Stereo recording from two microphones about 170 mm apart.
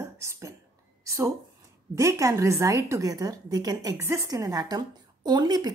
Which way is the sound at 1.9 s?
20° right (ahead or behind).